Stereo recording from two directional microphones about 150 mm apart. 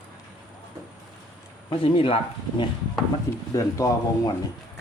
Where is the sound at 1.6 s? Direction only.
35° left (ahead or behind).